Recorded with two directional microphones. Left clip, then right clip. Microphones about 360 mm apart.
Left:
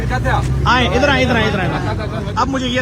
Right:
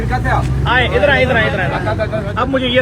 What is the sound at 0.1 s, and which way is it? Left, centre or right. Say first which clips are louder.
Speech: right 1 dB; centre.